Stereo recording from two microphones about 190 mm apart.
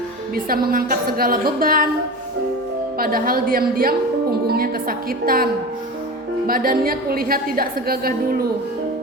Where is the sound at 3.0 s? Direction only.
50° right (ahead or behind).